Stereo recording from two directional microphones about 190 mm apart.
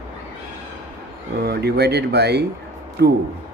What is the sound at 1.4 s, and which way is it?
Speech, 55° right (ahead or behind).